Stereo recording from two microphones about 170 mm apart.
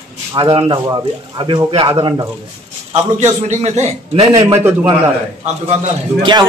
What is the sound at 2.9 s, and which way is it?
A man's voice, 40° right (ahead or behind).